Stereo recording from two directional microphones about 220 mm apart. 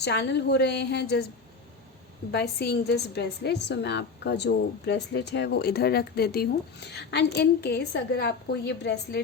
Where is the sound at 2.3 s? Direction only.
45° left (ahead or behind).